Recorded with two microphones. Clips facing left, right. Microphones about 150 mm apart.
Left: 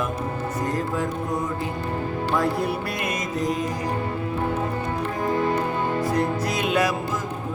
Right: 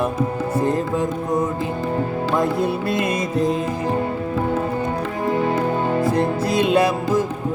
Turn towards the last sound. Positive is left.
turn(degrees=-30)  # may be behind; listen again after turning